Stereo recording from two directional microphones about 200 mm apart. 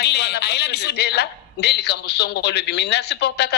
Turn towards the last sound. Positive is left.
turn(degrees=55)  # may be behind; listen again after turning